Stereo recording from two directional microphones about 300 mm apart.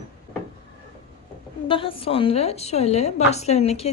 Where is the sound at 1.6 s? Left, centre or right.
Centre.